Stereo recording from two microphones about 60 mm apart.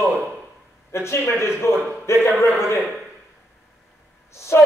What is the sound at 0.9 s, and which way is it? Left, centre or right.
Speech, left.